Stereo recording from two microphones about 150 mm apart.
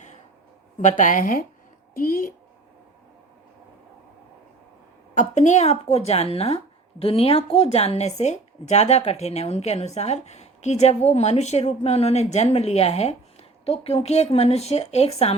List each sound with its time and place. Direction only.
0.8 s a woman's voice: 55° left (ahead or behind)
5.3 s speech: 50° left (ahead or behind)